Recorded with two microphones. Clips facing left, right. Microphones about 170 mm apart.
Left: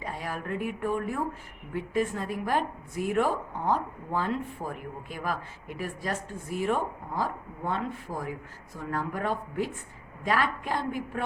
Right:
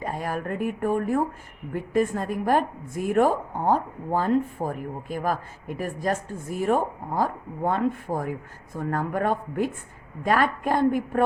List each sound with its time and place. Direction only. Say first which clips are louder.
0.0 s a woman's voice: right 6 dB; 45° right (ahead or behind)